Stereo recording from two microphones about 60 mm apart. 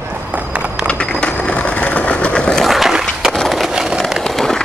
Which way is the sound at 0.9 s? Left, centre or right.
Centre.